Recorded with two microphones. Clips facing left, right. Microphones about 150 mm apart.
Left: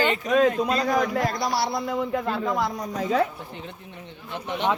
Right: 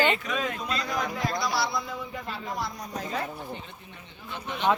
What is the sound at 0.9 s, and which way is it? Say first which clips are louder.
Speech: left 8 dB; 70° left (ahead or behind).